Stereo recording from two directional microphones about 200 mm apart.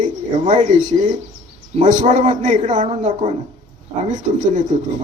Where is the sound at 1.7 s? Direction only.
35° right (ahead or behind).